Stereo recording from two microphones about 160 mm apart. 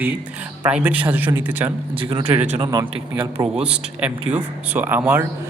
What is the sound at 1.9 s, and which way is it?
Speech, 35° right (ahead or behind).